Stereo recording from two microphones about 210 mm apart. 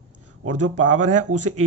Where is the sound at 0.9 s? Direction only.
35° right (ahead or behind).